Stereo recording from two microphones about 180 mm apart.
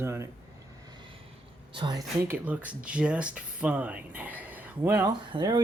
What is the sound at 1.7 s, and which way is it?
Speech, 25° right (ahead or behind).